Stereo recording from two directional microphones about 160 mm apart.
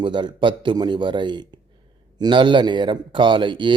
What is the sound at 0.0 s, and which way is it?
Speech, 30° right (ahead or behind).